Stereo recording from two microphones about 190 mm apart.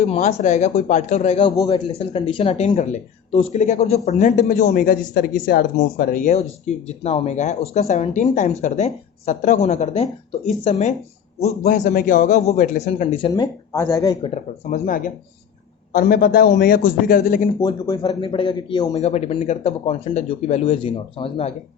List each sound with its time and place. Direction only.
0.0 s speech: 35° left (ahead or behind)
14.7 s a man's voice: 45° left (ahead or behind)
17.6 s a man's voice: 20° left (ahead or behind)
19.0 s speech: 35° left (ahead or behind)